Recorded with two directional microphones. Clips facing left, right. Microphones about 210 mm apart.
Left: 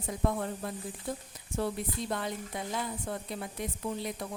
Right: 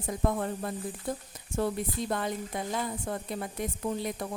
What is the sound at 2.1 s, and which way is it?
Speech, 50° right (ahead or behind).